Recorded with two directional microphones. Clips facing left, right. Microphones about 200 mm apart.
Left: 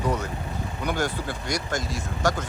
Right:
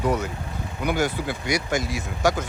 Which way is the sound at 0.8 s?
10° right (ahead or behind).